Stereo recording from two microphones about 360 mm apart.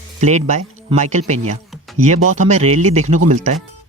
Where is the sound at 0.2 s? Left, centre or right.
Centre.